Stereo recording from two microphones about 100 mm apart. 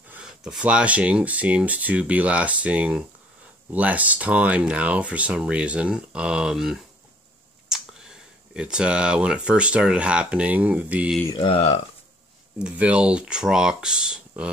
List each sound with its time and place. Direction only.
0.2 s speech: 5° right (ahead or behind)
11.4 s speech: 80° left
12.5 s speech: 10° right (ahead or behind)